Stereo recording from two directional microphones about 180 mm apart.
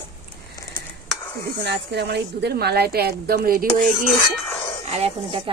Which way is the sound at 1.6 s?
70° right (ahead or behind).